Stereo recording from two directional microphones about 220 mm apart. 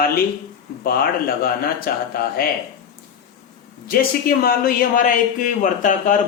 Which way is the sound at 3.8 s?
40° left (ahead or behind).